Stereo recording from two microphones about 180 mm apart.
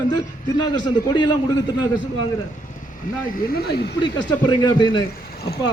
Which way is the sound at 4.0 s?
25° left (ahead or behind).